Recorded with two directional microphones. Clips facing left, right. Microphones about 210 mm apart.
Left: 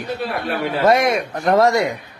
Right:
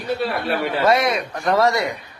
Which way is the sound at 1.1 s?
20° left (ahead or behind).